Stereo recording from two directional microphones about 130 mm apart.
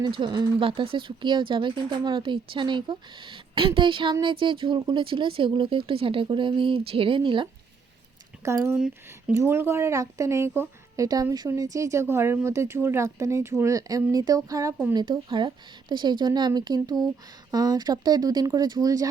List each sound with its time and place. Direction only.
0.0 s speech: 35° right (ahead or behind)
8.4 s a woman's voice: 20° right (ahead or behind)
8.7 s speech: 10° right (ahead or behind)
9.3 s a woman's voice: 20° right (ahead or behind)
14.9 s a woman's voice: 35° right (ahead or behind)